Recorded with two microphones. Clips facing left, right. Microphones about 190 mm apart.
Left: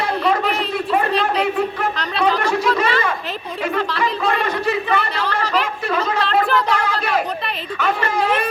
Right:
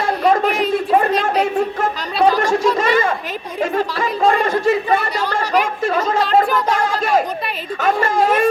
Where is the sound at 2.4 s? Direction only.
45° right (ahead or behind).